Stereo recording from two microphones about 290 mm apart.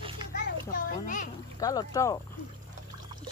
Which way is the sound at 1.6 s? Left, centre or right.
Centre.